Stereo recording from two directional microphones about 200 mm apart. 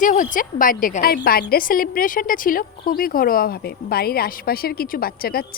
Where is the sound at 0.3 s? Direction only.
45° left (ahead or behind).